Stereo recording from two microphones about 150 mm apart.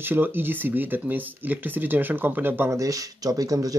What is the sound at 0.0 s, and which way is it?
Speech, 15° right (ahead or behind).